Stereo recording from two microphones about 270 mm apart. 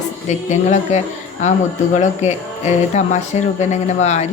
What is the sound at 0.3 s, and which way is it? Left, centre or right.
Speech, left.